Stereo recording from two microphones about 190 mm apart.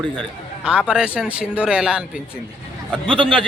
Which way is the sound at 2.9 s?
25° right (ahead or behind).